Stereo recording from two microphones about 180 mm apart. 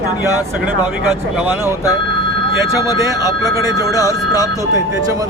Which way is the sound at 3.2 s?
20° left (ahead or behind).